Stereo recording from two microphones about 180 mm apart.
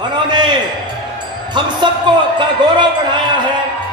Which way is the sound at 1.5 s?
25° right (ahead or behind).